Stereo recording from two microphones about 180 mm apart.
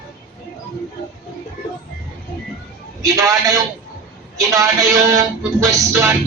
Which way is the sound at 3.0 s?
20° right (ahead or behind).